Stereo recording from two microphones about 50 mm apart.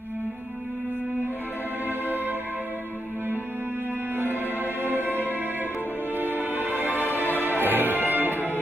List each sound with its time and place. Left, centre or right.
1.9 s music: right
4.8 s music: right